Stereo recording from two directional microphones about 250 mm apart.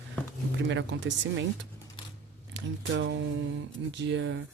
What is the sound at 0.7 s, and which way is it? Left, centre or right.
Speech, right.